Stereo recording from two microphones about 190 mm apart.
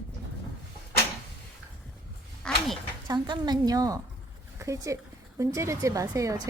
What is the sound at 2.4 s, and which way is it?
Speech, 5° left (ahead or behind).